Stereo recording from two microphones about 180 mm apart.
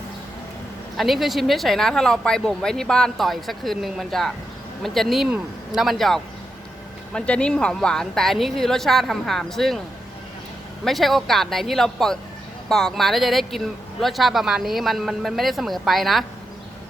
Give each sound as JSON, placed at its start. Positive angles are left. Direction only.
{"t": 0.9, "sound": "speech", "side_deg": 0}
{"t": 10.8, "sound": "speech", "side_deg": 0}